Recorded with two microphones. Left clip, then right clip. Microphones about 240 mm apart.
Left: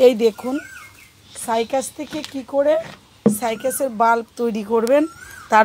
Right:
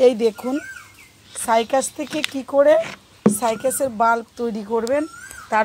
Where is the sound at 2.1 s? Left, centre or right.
Right.